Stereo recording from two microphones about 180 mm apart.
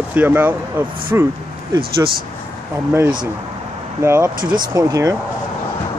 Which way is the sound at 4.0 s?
15° right (ahead or behind).